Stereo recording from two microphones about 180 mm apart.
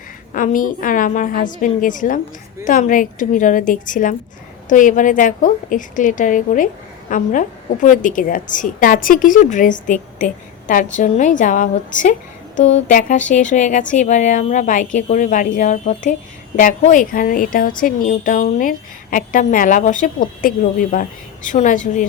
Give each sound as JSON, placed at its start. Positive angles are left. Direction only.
{"t": 0.3, "sound": "a woman's voice", "side_deg": 50}